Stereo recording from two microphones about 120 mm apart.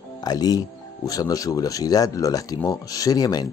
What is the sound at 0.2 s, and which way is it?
Speech, 35° left (ahead or behind).